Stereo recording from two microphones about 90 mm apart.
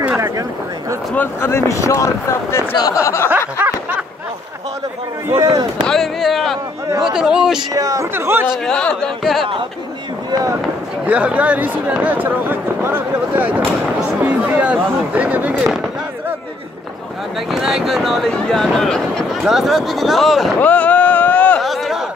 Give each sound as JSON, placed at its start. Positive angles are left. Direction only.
{"t": 0.2, "sound": "speech", "side_deg": -35}
{"t": 1.1, "sound": "speech", "side_deg": 25}
{"t": 3.3, "sound": "snicker", "side_deg": -20}
{"t": 5.4, "sound": "speech", "side_deg": -45}
{"t": 5.9, "sound": "a sound", "side_deg": 0}
{"t": 7.1, "sound": "speech", "side_deg": -5}
{"t": 7.7, "sound": "speech", "side_deg": -40}
{"t": 8.1, "sound": "speech", "side_deg": -25}
{"t": 8.6, "sound": "speech", "side_deg": 10}
{"t": 11.1, "sound": "speech", "side_deg": -15}
{"t": 13.9, "sound": "a sound", "side_deg": -15}
{"t": 17.5, "sound": "speech", "side_deg": 0}
{"t": 20.5, "sound": "boat", "side_deg": 15}
{"t": 21.5, "sound": "a sound", "side_deg": 0}